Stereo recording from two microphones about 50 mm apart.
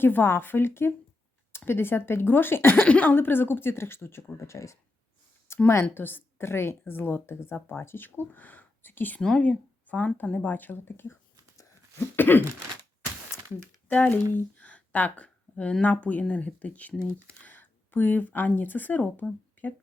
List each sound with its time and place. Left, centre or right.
0.0 s a woman's voice: left
2.8 s speech: left
3.2 s a woman's voice: left
5.5 s a sound: left
5.9 s a woman's voice: left
9.4 s speech: left
10.3 s a woman's voice: left
13.8 s a sound: left
15.8 s speech: left
17.4 s a sound: left
18.5 s speech: left